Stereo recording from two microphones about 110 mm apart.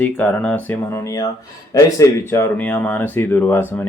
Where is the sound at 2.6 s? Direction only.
15° left (ahead or behind).